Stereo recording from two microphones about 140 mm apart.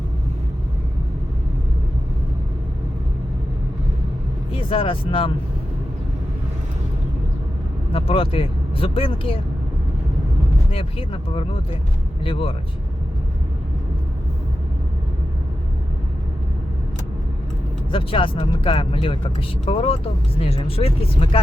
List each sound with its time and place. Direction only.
4.5 s speech: 40° left (ahead or behind)
7.9 s speech: 40° left (ahead or behind)
10.7 s speech: 40° left (ahead or behind)
17.9 s speech: 40° left (ahead or behind)